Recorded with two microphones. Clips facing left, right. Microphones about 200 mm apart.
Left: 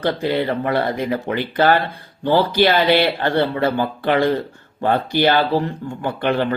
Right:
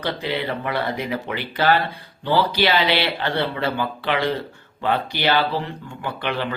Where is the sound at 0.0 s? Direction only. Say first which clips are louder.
Left 6 dB; 50° left (ahead or behind).